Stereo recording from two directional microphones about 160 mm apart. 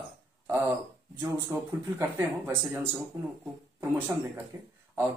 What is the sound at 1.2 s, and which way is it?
Speech, 20° right (ahead or behind).